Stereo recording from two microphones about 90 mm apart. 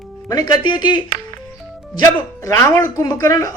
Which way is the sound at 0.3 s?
45° left (ahead or behind).